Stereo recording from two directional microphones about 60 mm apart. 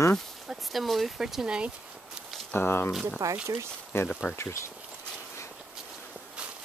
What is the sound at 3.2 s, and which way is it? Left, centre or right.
Speech, right.